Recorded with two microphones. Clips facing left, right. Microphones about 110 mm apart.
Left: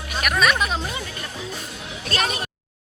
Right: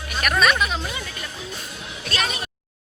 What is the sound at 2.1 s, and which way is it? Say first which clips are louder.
Speech: left 2 dB; 45° left (ahead or behind).